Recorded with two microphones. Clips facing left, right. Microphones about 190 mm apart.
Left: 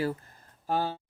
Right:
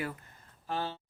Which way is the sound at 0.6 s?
45° left (ahead or behind).